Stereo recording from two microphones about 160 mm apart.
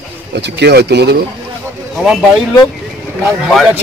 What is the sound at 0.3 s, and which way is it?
Speech, 90° right.